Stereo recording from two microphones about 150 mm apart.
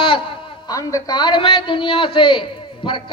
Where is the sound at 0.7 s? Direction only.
25° left (ahead or behind).